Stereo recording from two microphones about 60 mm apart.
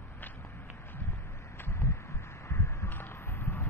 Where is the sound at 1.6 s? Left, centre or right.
Left.